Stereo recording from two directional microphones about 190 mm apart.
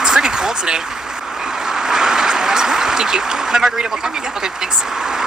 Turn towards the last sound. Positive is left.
turn(degrees=-5)  # may be behind; listen again after turning